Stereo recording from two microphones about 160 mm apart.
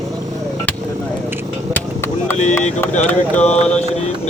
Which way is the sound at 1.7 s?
15° left (ahead or behind).